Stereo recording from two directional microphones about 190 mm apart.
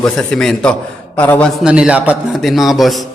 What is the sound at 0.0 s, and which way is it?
Speech, 5° left (ahead or behind).